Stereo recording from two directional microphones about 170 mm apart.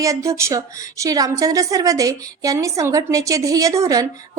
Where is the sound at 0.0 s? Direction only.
20° right (ahead or behind).